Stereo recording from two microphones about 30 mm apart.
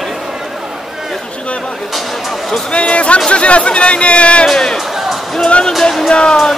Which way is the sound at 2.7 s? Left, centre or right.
Left.